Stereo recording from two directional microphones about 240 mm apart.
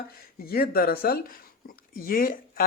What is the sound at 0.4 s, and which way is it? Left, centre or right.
Speech, left.